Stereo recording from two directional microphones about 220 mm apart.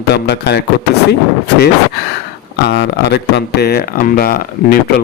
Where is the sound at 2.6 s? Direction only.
50° left (ahead or behind).